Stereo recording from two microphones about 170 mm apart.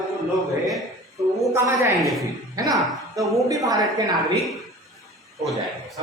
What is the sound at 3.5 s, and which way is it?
Speech, 20° right (ahead or behind).